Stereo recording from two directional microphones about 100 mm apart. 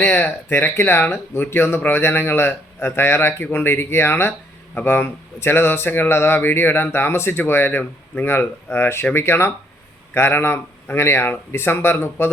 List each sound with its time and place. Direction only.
0.0 s a man's voice: 15° left (ahead or behind)